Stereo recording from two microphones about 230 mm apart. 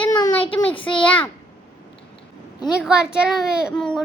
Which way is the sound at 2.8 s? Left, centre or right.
Centre.